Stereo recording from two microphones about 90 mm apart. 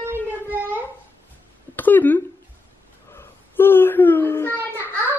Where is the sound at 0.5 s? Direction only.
20° right (ahead or behind).